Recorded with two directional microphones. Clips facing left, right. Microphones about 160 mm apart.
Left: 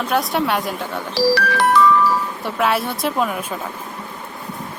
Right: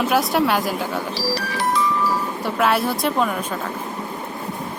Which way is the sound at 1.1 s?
65° left (ahead or behind).